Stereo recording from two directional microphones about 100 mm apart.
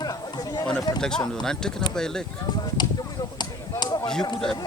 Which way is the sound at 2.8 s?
45° left (ahead or behind).